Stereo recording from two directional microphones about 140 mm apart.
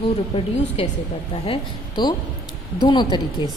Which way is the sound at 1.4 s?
35° left (ahead or behind).